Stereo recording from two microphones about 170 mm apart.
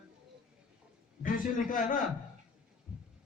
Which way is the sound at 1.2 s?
55° left (ahead or behind).